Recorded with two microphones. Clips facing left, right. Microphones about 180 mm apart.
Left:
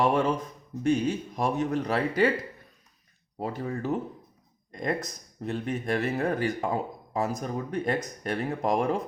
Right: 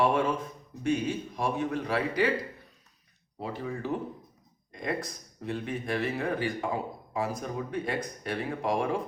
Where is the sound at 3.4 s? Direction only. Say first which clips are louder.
Left 3 dB; 45° left (ahead or behind).